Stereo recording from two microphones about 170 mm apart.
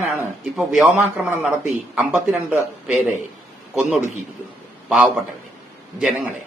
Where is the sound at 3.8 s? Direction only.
Centre (ahead or behind).